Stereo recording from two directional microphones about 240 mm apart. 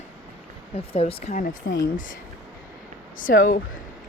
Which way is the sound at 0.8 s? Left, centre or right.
Left.